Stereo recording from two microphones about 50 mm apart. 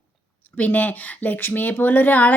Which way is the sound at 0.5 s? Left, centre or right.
Left.